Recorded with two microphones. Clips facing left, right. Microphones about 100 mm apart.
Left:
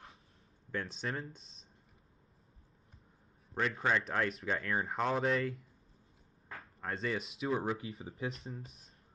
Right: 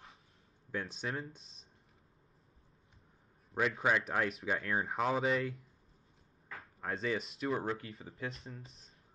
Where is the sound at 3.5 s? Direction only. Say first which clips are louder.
Right 1 dB; 5° right (ahead or behind).